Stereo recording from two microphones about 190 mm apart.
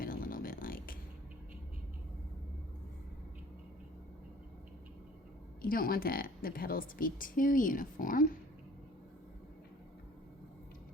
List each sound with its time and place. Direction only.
0.0 s music: 50° left (ahead or behind)
5.6 s a woman's voice: 50° left (ahead or behind)